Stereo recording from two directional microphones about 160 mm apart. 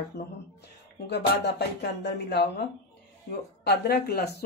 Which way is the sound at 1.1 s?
90° left.